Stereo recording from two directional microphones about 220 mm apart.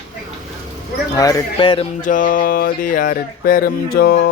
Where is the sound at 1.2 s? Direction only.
15° left (ahead or behind); by 3.7 s 40° left (ahead or behind).